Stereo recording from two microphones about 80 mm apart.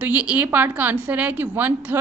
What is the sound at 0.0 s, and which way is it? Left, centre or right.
A woman's voice, centre.